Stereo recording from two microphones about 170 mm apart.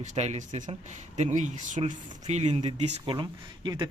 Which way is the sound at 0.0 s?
45° right (ahead or behind).